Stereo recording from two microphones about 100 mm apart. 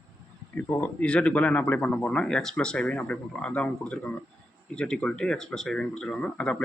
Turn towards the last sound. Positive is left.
turn(degrees=5)  # may be behind; listen again after turning